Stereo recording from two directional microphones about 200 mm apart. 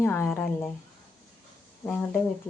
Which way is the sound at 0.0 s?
10° left (ahead or behind).